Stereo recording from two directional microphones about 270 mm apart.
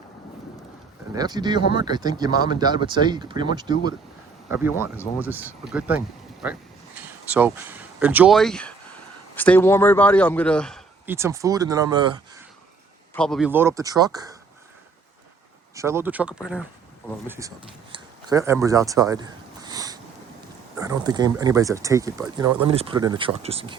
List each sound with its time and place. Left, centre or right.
1.1 s a man's voice: centre
13.1 s speech: centre
15.7 s speech: centre
17.6 s a sound: centre
20.7 s speech: centre